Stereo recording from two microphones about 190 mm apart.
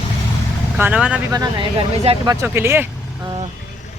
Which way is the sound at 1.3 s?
25° right (ahead or behind).